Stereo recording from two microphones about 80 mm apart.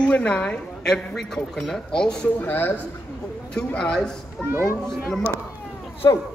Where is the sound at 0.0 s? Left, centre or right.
Centre.